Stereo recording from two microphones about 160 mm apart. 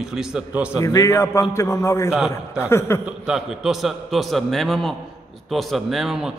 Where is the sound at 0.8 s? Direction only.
20° left (ahead or behind).